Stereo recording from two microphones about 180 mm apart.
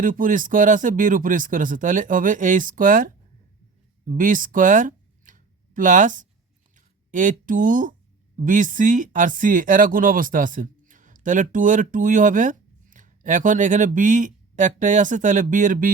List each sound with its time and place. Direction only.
0.0 s speech: 50° right (ahead or behind)
4.0 s a sound: 50° right (ahead or behind)
8.4 s speech: 45° right (ahead or behind)